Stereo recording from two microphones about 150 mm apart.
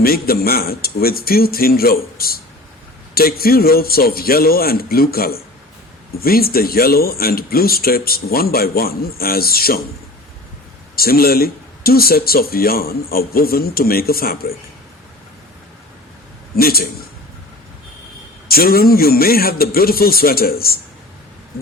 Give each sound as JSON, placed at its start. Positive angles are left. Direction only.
{"t": 0.0, "sound": "speech", "side_deg": 85}
{"t": 10.9, "sound": "speech", "side_deg": 90}
{"t": 16.6, "sound": "speech", "side_deg": 90}
{"t": 18.4, "sound": "a man's voice", "side_deg": 90}